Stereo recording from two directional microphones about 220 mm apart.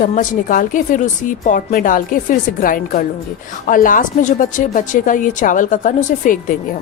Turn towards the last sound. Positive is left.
turn(degrees=35)  # may be behind; listen again after turning